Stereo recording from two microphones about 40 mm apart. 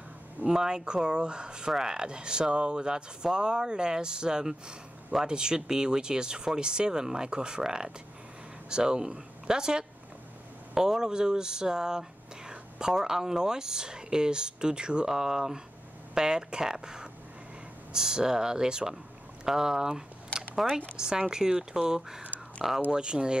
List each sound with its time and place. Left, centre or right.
0.5 s speech: centre